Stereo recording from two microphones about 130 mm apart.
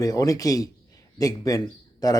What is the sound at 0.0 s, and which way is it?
A man's voice, 30° left (ahead or behind).